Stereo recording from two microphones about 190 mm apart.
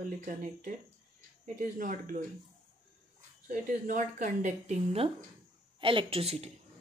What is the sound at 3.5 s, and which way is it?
Speech, 45° right (ahead or behind).